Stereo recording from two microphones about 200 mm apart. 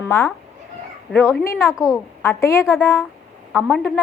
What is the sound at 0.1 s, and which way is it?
A woman's voice, 10° left (ahead or behind).